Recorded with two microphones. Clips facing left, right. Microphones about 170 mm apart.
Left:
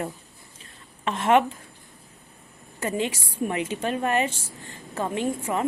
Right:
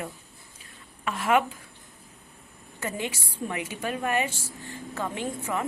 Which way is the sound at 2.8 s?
20° left (ahead or behind).